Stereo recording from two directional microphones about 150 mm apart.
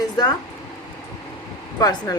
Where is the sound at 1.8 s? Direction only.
25° left (ahead or behind).